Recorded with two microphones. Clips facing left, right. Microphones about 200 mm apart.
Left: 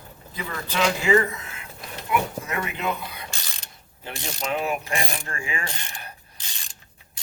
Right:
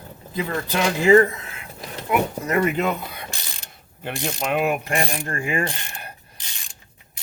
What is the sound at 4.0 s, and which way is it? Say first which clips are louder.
Speech: right 5 dB; 60° right (ahead or behind).